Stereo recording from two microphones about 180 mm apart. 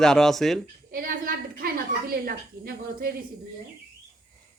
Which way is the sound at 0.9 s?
50° right (ahead or behind).